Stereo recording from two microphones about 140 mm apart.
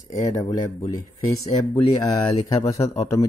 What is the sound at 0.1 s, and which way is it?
Speech, 25° left (ahead or behind).